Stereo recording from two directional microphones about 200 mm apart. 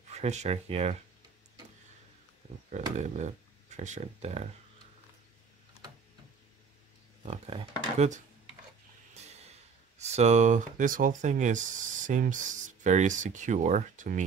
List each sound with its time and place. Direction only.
0.1 s speech: 35° right (ahead or behind)
2.7 s speech: 35° right (ahead or behind)
7.2 s speech: 30° right (ahead or behind)
9.9 s speech: 35° right (ahead or behind)